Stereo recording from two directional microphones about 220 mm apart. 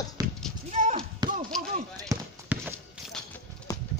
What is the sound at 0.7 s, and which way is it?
Basketball bounce, 30° right (ahead or behind).